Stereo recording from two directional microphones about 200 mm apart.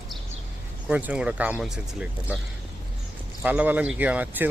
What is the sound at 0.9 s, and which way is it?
Speech, 5° right (ahead or behind).